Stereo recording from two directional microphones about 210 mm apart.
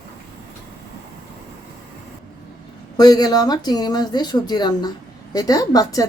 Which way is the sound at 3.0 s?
20° left (ahead or behind).